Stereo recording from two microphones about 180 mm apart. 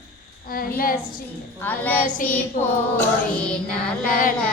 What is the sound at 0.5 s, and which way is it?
Speech, 55° left (ahead or behind).